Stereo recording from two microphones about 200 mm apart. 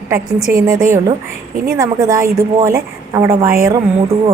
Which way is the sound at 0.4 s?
45° right (ahead or behind).